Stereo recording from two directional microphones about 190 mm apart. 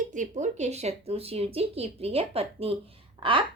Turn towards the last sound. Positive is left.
turn(degrees=-25)  # may be behind; listen again after turning